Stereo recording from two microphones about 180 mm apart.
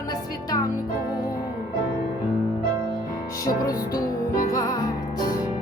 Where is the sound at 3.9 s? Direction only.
45° left (ahead or behind).